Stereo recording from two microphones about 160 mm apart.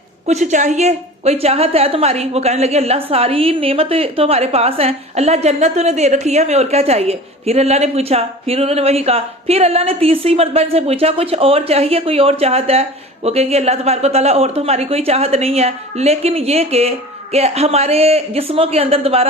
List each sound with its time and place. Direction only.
0.3 s a woman's voice: 50° right (ahead or behind)